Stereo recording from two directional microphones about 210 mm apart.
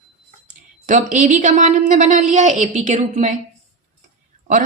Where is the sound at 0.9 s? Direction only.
35° right (ahead or behind).